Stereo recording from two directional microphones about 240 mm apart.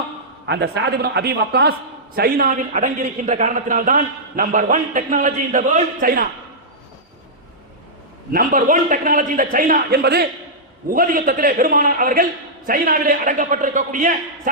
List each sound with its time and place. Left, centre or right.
0.4 s a man's voice: right
8.3 s a man's voice: right